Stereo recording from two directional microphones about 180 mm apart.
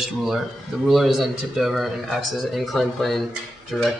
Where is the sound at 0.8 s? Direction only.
Centre (ahead or behind).